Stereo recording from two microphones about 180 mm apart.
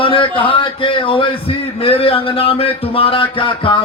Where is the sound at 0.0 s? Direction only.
30° left (ahead or behind).